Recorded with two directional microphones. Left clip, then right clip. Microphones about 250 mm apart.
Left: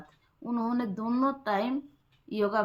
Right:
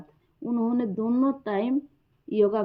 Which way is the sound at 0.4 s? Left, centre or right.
Centre.